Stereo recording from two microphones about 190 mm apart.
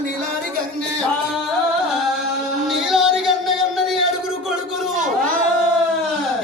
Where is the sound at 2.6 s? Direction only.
Centre (ahead or behind).